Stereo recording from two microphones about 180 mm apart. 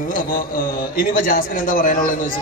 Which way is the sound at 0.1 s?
50° left (ahead or behind).